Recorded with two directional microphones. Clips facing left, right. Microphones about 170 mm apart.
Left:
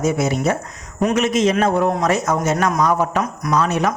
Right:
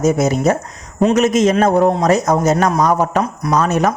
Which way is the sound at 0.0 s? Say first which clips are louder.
Right 4 dB; 40° right (ahead or behind).